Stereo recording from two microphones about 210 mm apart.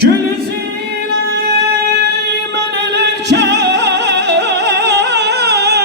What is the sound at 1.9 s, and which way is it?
Music, 50° right (ahead or behind).